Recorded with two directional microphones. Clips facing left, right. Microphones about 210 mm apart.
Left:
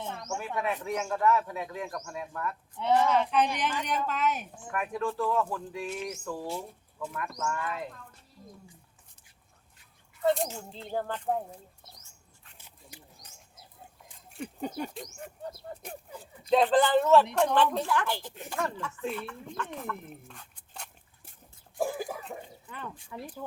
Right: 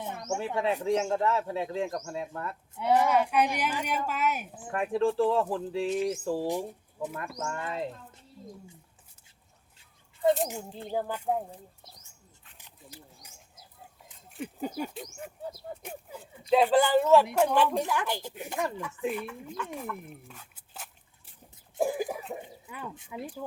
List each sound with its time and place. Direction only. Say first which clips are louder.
0.0 s speech: right 3 dB; 20° right (ahead or behind)
2.9 s speech: right 1 dB; 15° right (ahead or behind)
4.7 s speech: right 5 dB; 30° right (ahead or behind)
6.5 s speech: right 5 dB; 20° right (ahead or behind)
10.9 s speech: right 1 dB; 10° right (ahead or behind)
14.3 s speech: right 1 dB; centre (ahead or behind)
21.8 s cough: right 3 dB; 15° right (ahead or behind)
22.4 s speech: right 1 dB; 10° right (ahead or behind)